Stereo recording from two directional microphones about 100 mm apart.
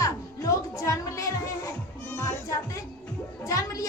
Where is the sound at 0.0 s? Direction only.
35° left (ahead or behind).